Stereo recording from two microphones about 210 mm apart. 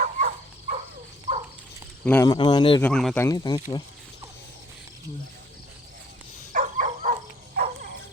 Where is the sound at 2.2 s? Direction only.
20° left (ahead or behind).